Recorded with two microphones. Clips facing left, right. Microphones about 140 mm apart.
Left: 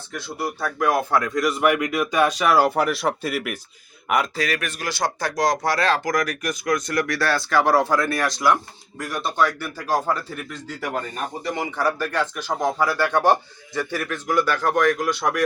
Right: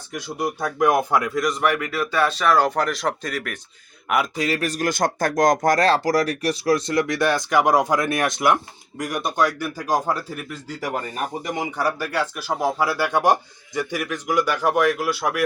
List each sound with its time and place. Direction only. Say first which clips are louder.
0.1 s a man's voice: right 2 dB; 15° right (ahead or behind)
1.4 s speech: left 2 dB; 5° left (ahead or behind)
4.4 s a man's voice: right 3 dB; 30° right (ahead or behind); by 15.4 s 5° right (ahead or behind)